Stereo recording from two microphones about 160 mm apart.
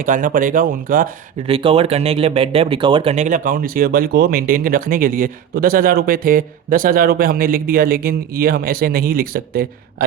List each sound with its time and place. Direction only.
0.0 s speech: 60° right (ahead or behind)
1.5 s speech: 35° right (ahead or behind); by 9.6 s 65° right (ahead or behind)